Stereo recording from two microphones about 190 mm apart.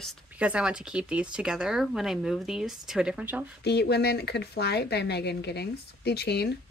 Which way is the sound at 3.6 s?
60° left (ahead or behind).